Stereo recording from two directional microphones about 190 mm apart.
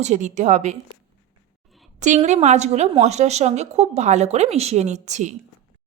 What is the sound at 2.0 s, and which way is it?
A woman's voice, 40° right (ahead or behind).